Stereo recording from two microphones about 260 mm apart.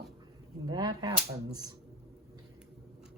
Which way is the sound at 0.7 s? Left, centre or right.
Centre.